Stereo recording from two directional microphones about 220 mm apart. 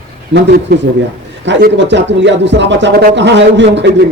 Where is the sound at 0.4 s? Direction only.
50° right (ahead or behind).